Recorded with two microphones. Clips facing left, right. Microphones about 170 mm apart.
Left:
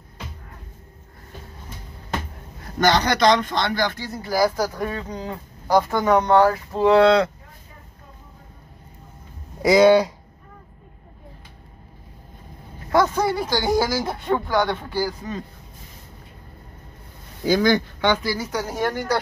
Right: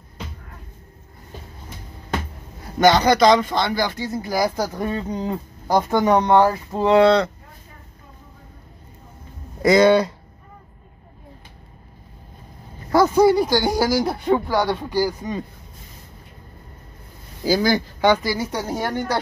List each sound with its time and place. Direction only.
2.8 s speech: 10° right (ahead or behind)
9.6 s speech: 10° left (ahead or behind)
12.9 s speech: 10° right (ahead or behind)
17.5 s speech: 10° right (ahead or behind)
18.4 s speech: 30° right (ahead or behind)